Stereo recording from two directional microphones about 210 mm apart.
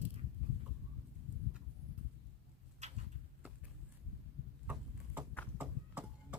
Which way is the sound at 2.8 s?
30° right (ahead or behind).